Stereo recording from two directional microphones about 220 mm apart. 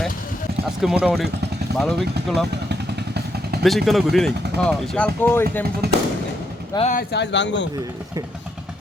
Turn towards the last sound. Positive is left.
turn(degrees=55)  # may be behind; listen again after turning